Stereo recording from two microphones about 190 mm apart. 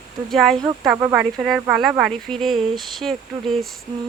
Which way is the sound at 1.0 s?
15° right (ahead or behind).